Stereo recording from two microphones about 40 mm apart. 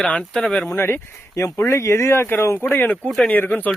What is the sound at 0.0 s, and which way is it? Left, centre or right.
Speech, left.